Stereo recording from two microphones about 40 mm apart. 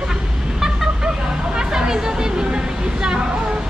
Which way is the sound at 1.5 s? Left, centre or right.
Centre.